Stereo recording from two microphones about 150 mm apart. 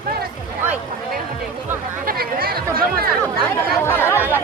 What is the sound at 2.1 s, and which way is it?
Chatter, 75° right (ahead or behind).